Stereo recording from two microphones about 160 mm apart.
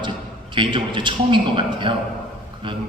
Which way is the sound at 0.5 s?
30° right (ahead or behind).